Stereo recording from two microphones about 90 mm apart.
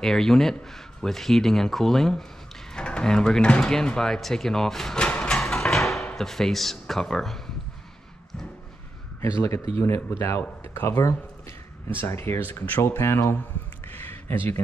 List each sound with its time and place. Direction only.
0.0 s speech: 5° left (ahead or behind)
2.7 s drawer open or close: 10° left (ahead or behind)
6.1 s speech: 5° left (ahead or behind)
9.4 s speech: 30° left (ahead or behind)
13.9 s a sound: 25° left (ahead or behind)